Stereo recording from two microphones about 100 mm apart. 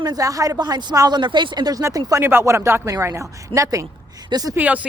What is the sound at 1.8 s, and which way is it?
Speech, 30° right (ahead or behind).